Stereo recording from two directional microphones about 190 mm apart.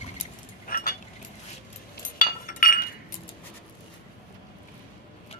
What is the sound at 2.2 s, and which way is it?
Chink, 45° left (ahead or behind).